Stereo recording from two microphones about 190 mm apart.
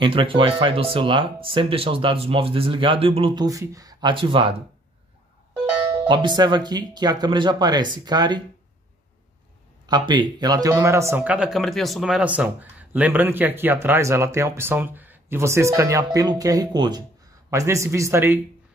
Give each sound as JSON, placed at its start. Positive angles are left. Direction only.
{"t": 0.0, "sound": "speech", "side_deg": -25}
{"t": 6.0, "sound": "speech", "side_deg": -25}
{"t": 9.8, "sound": "speech", "side_deg": -25}